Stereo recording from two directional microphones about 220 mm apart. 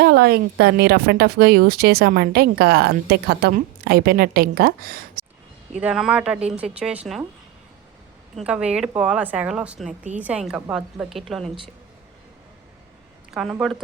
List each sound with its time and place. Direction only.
0.0 s speech: 45° right (ahead or behind)
5.8 s speech: centre (ahead or behind)
8.4 s speech: 5° right (ahead or behind)
13.3 s speech: centre (ahead or behind)